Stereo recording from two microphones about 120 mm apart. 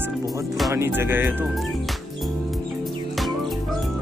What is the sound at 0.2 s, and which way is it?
Speech, 30° right (ahead or behind).